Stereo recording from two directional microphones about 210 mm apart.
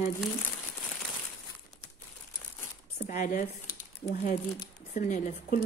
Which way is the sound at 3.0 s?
35° left (ahead or behind).